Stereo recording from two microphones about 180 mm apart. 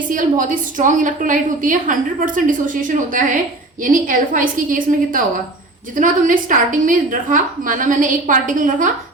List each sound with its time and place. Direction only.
0.1 s a woman's voice: 45° right (ahead or behind)